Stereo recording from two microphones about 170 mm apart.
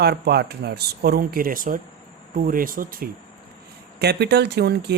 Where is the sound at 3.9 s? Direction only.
75° right (ahead or behind).